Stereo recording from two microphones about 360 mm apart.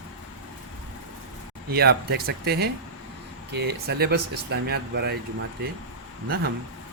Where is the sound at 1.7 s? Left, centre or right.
Right.